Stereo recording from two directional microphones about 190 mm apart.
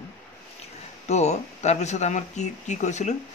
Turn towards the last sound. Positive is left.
turn(degrees=40)  # may be behind; listen again after turning